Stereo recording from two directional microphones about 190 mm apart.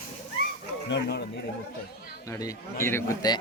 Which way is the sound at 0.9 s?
60° left (ahead or behind).